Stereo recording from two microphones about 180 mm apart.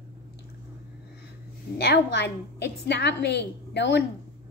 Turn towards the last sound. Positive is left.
turn(degrees=70)  # may be behind; listen again after turning